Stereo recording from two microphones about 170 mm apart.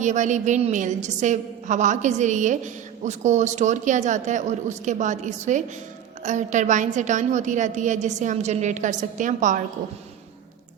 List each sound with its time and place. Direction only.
0.0 s a woman's voice: 45° right (ahead or behind)